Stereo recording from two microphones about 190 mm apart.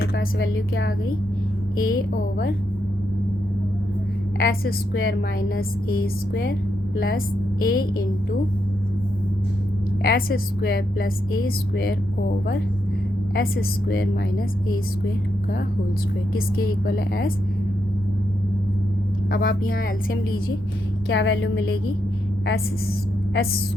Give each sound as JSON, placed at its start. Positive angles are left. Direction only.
{"t": 0.0, "sound": "a woman's voice", "side_deg": 55}
{"t": 4.4, "sound": "a woman's voice", "side_deg": 55}
{"t": 10.0, "sound": "a woman's voice", "side_deg": 50}
{"t": 13.3, "sound": "a woman's voice", "side_deg": 55}
{"t": 16.3, "sound": "a woman's voice", "side_deg": 50}
{"t": 19.3, "sound": "a woman's voice", "side_deg": 50}
{"t": 21.1, "sound": "speech", "side_deg": 70}